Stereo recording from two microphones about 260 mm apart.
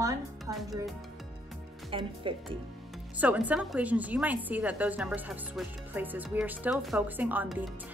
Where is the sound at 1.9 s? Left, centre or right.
Centre.